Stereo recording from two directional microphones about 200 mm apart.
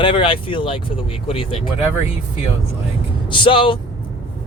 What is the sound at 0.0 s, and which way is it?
Speech, 25° left (ahead or behind).